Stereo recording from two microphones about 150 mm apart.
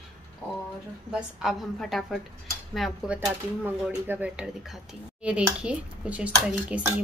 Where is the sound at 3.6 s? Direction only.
10° right (ahead or behind).